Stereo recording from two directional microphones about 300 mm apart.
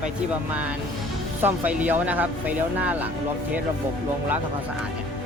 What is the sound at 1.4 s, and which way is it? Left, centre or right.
Speech, centre.